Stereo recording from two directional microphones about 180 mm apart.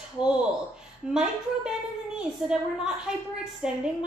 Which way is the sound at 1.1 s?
5° right (ahead or behind).